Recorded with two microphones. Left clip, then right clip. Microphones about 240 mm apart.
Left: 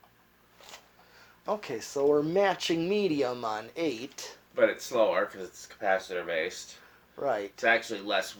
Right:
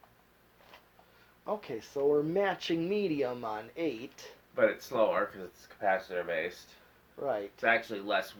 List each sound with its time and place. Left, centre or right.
1.5 s speech: left
4.5 s speech: right
7.2 s speech: left
7.6 s speech: right